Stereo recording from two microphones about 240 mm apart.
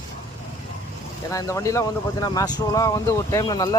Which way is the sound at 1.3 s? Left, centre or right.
Centre.